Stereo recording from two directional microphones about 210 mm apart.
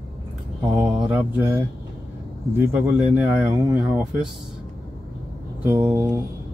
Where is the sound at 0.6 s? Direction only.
20° right (ahead or behind).